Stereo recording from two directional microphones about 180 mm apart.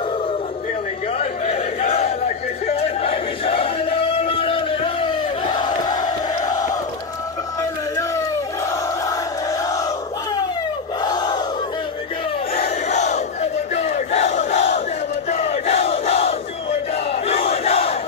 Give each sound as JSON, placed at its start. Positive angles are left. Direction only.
{"t": 1.1, "sound": "a sound", "side_deg": 35}
{"t": 5.4, "sound": "crowd", "side_deg": 25}
{"t": 9.0, "sound": "crowd", "side_deg": 20}
{"t": 11.0, "sound": "battle cry", "side_deg": 25}
{"t": 12.5, "sound": "battle cry", "side_deg": 35}
{"t": 15.2, "sound": "crowd", "side_deg": 40}